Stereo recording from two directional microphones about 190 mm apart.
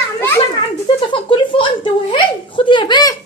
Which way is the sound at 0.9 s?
25° left (ahead or behind).